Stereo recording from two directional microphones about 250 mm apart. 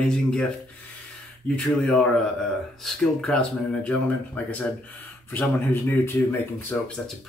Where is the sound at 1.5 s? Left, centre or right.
Centre.